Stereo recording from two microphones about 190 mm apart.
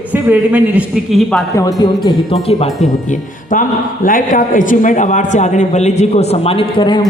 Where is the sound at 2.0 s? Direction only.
30° left (ahead or behind).